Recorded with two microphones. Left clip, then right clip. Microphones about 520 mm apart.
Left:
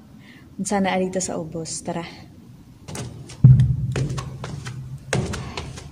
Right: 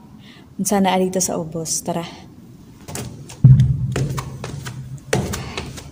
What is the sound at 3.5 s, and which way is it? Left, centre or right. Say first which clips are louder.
Music: right 3 dB; left.